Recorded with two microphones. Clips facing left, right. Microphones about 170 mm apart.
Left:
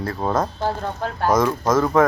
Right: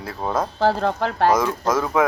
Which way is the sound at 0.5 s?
90° right.